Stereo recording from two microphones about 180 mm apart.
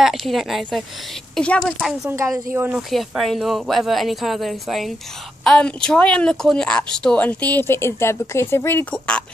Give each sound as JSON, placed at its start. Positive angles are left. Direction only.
{"t": 0.0, "sound": "speech", "side_deg": 0}
{"t": 2.1, "sound": "speech", "side_deg": -15}
{"t": 2.9, "sound": "speech", "side_deg": 0}